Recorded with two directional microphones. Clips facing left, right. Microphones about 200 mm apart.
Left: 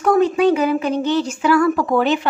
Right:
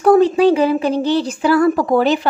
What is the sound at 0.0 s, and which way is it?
Speech, 30° right (ahead or behind).